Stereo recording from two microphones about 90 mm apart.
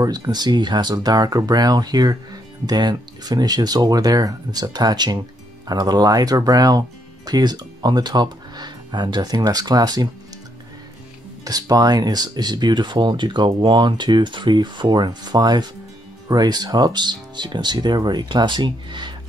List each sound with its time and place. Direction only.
0.0 s speech: 50° right (ahead or behind)
11.4 s speech: 45° right (ahead or behind)